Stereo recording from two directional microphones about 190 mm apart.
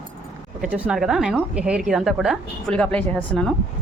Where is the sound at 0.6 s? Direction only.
5° right (ahead or behind).